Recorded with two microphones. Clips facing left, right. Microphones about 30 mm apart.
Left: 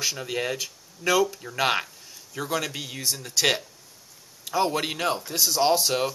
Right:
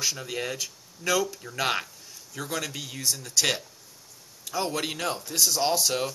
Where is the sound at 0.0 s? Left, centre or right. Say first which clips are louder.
Left 2 dB; centre.